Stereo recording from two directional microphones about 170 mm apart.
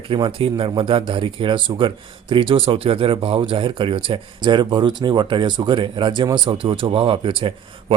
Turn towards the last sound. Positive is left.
turn(degrees=-30)  # may be behind; listen again after turning